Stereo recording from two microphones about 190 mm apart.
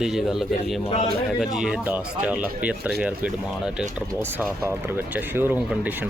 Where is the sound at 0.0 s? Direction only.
Centre (ahead or behind).